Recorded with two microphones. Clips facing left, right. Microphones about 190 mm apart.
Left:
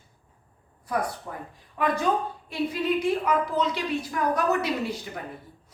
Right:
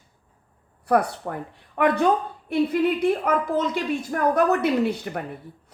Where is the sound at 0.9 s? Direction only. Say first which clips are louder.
Right 8 dB; 65° right (ahead or behind).